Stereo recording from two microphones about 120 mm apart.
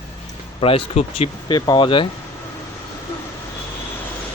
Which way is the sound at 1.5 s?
40° left (ahead or behind).